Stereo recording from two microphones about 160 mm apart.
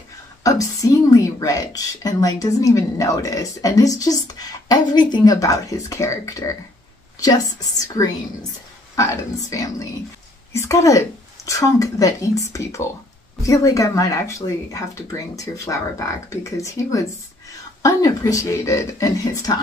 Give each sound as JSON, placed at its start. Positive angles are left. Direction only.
{"t": 0.4, "sound": "a woman's voice", "side_deg": 20}